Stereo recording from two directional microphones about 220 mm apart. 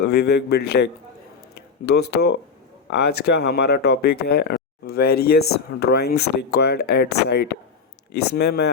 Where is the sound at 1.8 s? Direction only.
45° left (ahead or behind).